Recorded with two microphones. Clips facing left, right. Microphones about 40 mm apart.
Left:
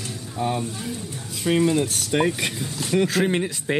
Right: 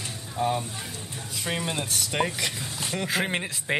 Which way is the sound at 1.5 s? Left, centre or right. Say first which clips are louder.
Left 10 dB; centre.